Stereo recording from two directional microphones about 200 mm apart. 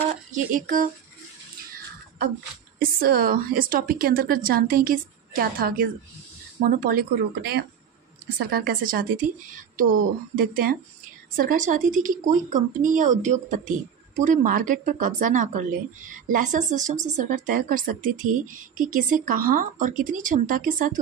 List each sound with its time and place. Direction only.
0.1 s speech: 40° right (ahead or behind)
2.8 s a woman's voice: 45° right (ahead or behind)
10.3 s a woman's voice: 45° right (ahead or behind)